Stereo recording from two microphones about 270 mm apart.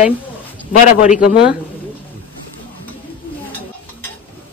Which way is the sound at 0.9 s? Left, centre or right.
Left.